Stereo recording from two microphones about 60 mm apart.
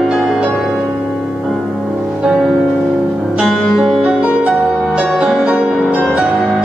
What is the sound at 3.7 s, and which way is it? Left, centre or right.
Music, centre.